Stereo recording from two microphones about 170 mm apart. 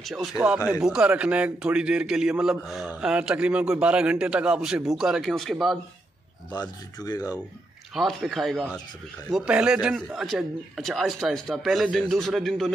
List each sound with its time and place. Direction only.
0.0 s a man's voice: centre (ahead or behind)
6.5 s speech: 25° left (ahead or behind)
7.9 s a man's voice: centre (ahead or behind)